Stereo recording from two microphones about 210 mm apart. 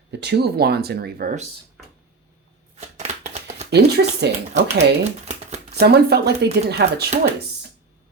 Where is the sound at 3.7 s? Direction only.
50° right (ahead or behind).